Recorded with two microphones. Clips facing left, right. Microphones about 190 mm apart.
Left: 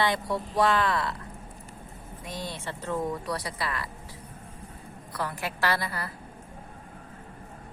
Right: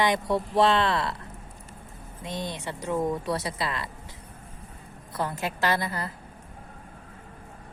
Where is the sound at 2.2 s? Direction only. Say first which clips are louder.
Right 3 dB; 20° right (ahead or behind).